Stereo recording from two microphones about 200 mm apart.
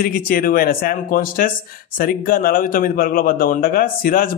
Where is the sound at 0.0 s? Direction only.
45° left (ahead or behind).